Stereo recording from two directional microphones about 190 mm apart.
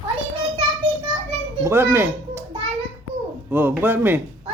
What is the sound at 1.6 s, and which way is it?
Speech, 15° right (ahead or behind).